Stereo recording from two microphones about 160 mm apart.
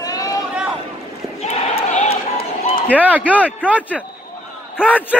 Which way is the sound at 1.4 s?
40° left (ahead or behind).